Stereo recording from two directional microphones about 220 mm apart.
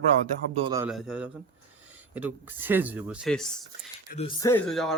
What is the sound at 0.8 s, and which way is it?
Speech, centre (ahead or behind).